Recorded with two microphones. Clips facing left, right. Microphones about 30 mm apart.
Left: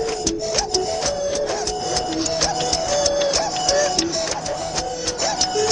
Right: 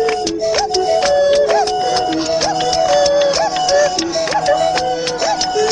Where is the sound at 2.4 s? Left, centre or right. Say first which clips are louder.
Right 7 dB; right.